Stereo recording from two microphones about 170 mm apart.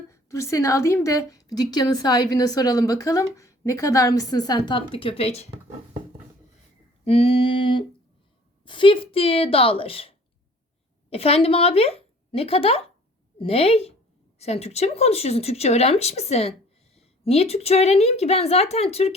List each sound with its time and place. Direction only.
0.1 s a woman's voice: 15° left (ahead or behind); by 5.5 s 35° left (ahead or behind)
7.0 s speech: 35° left (ahead or behind)